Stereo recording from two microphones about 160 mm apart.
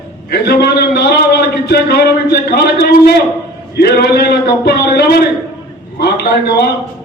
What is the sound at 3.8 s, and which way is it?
A man's voice, 90° left.